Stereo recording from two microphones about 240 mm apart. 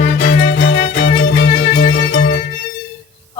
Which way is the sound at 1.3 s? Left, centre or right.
Left.